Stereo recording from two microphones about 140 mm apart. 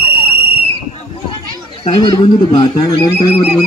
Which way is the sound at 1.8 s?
40° left (ahead or behind).